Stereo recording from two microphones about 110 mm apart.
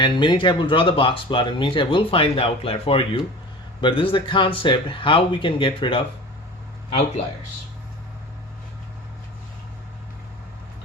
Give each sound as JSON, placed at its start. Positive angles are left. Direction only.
{"t": 0.0, "sound": "speech", "side_deg": 45}